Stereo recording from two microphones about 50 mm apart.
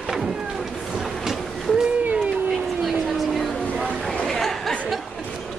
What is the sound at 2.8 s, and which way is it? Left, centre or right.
Vehicle, centre.